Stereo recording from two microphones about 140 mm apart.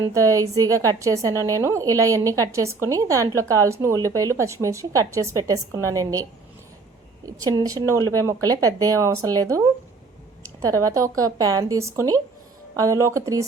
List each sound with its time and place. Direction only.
0.1 s a woman's voice: 25° right (ahead or behind)
7.3 s a woman's voice: 25° right (ahead or behind)